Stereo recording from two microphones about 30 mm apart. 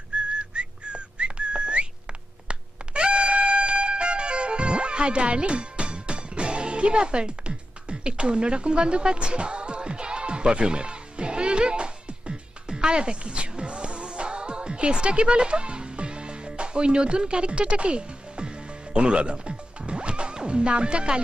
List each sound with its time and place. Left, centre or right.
0.3 s whistling: right
2.5 s music: right